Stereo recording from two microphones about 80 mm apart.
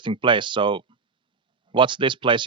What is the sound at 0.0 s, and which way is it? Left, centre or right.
Speech, right.